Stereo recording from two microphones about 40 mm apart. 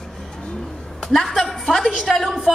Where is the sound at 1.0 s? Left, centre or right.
Centre.